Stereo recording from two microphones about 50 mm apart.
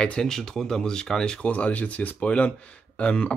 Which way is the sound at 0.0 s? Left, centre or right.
Centre.